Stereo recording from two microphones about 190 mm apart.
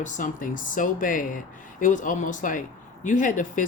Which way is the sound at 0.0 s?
45° left (ahead or behind).